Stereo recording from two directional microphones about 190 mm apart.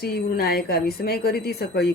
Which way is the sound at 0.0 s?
55° left (ahead or behind).